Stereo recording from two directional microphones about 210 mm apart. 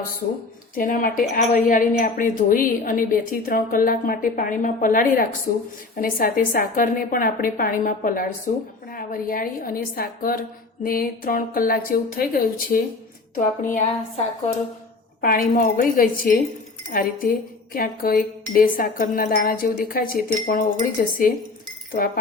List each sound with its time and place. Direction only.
0.8 s a woman's voice: 40° left (ahead or behind)
15.2 s a woman's voice: 45° left (ahead or behind)